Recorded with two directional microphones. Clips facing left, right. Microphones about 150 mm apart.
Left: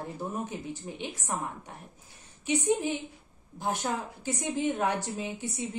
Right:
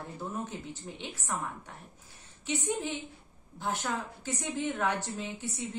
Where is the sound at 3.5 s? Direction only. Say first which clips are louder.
Left 2 dB; 15° left (ahead or behind).